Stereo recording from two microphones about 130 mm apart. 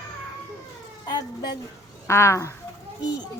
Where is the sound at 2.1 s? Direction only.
20° left (ahead or behind).